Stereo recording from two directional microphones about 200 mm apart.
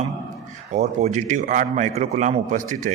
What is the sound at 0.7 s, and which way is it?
A man's voice, 35° right (ahead or behind).